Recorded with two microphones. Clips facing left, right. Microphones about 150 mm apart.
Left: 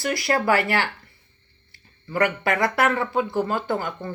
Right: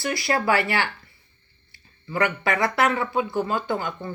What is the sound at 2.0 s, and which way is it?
Speech, 45° left (ahead or behind).